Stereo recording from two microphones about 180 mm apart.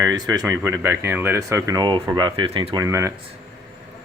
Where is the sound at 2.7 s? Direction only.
20° right (ahead or behind).